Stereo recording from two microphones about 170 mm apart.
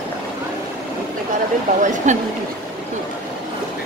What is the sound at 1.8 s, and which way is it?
Speech, 45° right (ahead or behind).